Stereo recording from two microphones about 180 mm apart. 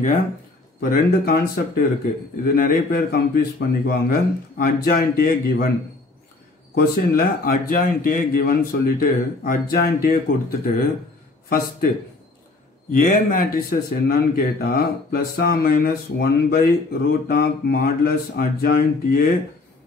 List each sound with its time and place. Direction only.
0.7 s a man's voice: 55° left (ahead or behind)
6.7 s a man's voice: 55° left (ahead or behind)
12.9 s a man's voice: 50° left (ahead or behind)